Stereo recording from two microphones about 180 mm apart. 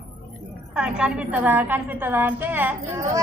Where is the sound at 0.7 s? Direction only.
5° right (ahead or behind).